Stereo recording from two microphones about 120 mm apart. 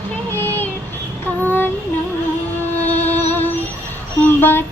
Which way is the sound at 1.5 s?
15° left (ahead or behind).